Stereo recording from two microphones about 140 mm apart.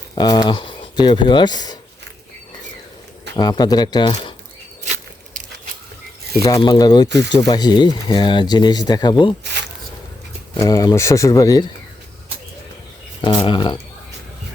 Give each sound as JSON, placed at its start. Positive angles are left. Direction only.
{"t": 0.2, "sound": "speech", "side_deg": 30}
{"t": 3.3, "sound": "speech", "side_deg": 30}
{"t": 6.6, "sound": "speech", "side_deg": 30}
{"t": 10.6, "sound": "speech", "side_deg": 25}
{"t": 13.2, "sound": "speech", "side_deg": 35}